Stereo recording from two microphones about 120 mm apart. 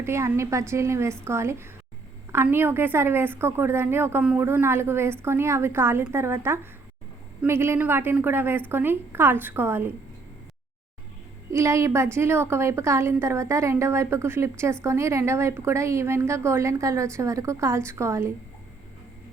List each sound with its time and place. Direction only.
0.0 s a woman's voice: 25° right (ahead or behind)
11.5 s a woman's voice: 25° right (ahead or behind)